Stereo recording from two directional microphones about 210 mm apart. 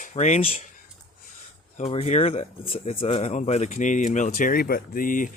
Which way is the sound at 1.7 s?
30° left (ahead or behind).